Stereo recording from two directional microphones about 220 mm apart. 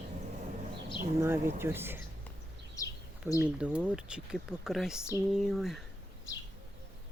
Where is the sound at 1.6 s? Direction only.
10° right (ahead or behind).